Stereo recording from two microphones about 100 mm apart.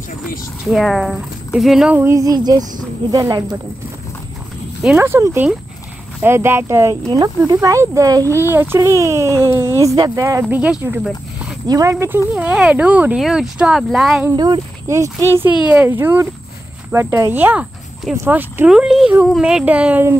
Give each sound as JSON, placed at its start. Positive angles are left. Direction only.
{"t": 0.7, "sound": "speech", "side_deg": 0}
{"t": 2.0, "sound": "speech", "side_deg": -30}
{"t": 4.9, "sound": "speech", "side_deg": -25}
{"t": 10.5, "sound": "speech", "side_deg": -15}
{"t": 11.6, "sound": "speech", "side_deg": -35}
{"t": 12.4, "sound": "speech", "side_deg": -10}
{"t": 14.3, "sound": "speech", "side_deg": -50}
{"t": 14.9, "sound": "speech", "side_deg": -30}
{"t": 15.6, "sound": "speech", "side_deg": -15}
{"t": 18.7, "sound": "speech", "side_deg": -5}